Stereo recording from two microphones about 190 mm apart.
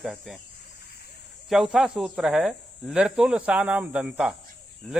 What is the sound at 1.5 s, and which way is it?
Speech, centre (ahead or behind).